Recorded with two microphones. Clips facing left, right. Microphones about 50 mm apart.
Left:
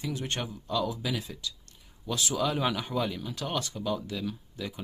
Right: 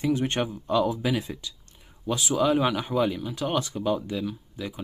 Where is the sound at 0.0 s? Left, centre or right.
Right.